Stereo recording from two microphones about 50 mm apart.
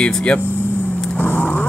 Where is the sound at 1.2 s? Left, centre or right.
Left.